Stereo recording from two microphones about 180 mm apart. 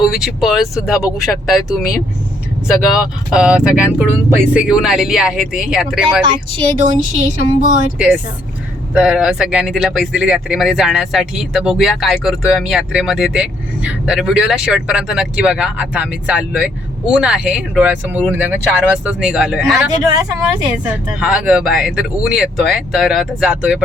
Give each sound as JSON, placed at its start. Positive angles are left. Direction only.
{"t": 0.0, "sound": "speech", "side_deg": -5}
{"t": 7.2, "sound": "speech", "side_deg": -40}
{"t": 7.9, "sound": "speech", "side_deg": -5}